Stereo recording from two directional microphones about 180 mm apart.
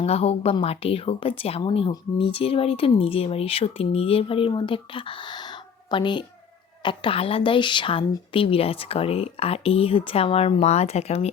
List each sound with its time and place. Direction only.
0.0 s a woman's voice: 35° left (ahead or behind)